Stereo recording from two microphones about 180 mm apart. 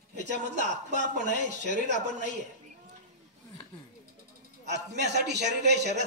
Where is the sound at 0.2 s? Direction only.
45° left (ahead or behind).